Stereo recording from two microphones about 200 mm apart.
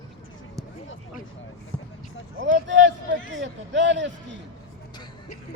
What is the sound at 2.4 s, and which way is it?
A man's voice, 65° right (ahead or behind).